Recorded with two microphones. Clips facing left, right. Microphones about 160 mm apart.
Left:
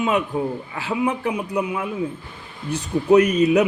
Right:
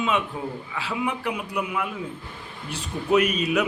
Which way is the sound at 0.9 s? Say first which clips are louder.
Left 6 dB; 20° left (ahead or behind).